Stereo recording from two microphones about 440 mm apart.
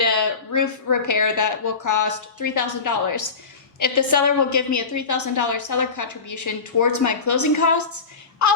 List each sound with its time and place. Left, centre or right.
0.0 s a woman's voice: left